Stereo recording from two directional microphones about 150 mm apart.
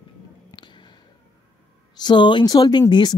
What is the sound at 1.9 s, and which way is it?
Speech, 30° left (ahead or behind).